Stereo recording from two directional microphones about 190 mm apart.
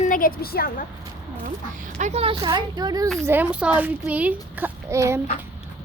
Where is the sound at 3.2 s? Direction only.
10° right (ahead or behind).